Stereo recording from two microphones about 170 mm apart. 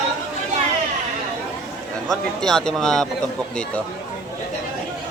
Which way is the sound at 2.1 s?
Centre (ahead or behind).